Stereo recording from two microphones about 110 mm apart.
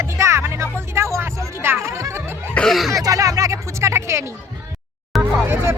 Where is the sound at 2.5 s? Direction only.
Centre (ahead or behind).